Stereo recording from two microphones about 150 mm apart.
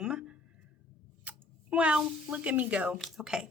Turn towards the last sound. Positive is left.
turn(degrees=-5)  # may be behind; listen again after turning